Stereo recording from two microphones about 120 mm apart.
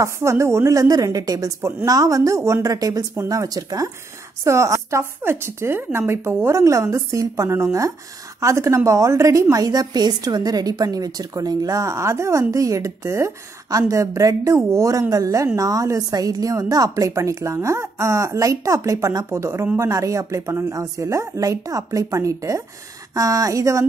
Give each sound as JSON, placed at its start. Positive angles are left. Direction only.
{"t": 0.0, "sound": "a woman's voice", "side_deg": -25}